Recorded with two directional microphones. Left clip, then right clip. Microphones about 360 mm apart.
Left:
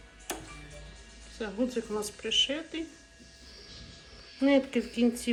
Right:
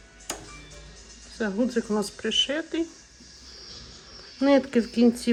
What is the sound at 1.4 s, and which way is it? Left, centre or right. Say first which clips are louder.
Speech: right 6 dB; right.